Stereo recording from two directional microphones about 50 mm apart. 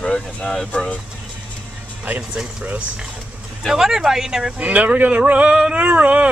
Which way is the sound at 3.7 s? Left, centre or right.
Centre.